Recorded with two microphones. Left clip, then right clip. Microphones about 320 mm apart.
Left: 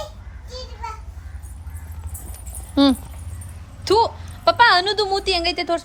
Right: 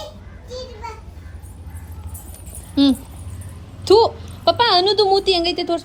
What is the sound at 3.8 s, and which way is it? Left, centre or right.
A woman's voice, centre.